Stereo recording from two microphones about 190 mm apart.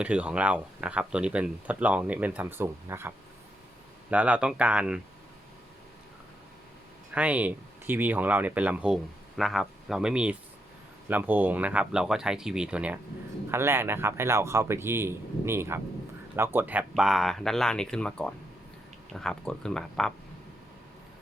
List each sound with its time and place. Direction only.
0.0 s speech: 5° right (ahead or behind)
4.1 s speech: 5° right (ahead or behind)
7.1 s speech: 5° right (ahead or behind)